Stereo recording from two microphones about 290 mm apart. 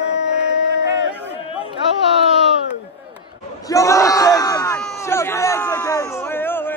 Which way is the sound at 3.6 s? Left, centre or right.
Centre.